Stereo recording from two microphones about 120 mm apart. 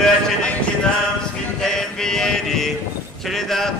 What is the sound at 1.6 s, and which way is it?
Mantra, 5° left (ahead or behind).